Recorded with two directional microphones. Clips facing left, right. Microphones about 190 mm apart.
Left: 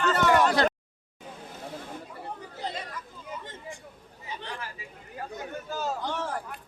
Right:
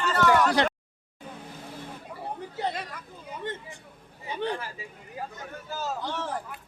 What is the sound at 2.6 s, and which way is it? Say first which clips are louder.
Chatter: right 4 dB; 60° right (ahead or behind).